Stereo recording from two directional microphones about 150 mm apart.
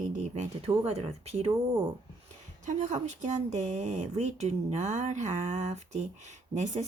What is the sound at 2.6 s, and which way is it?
Speech, 55° right (ahead or behind).